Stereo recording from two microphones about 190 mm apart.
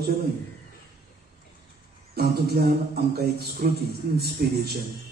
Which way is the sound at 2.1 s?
55° right (ahead or behind).